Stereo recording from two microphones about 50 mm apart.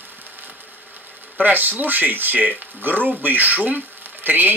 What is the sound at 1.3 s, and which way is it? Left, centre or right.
Speech, right.